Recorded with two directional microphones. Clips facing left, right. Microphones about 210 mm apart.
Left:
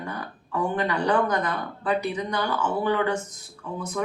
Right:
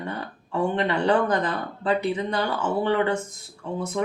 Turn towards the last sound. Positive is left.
turn(degrees=-25)  # may be behind; listen again after turning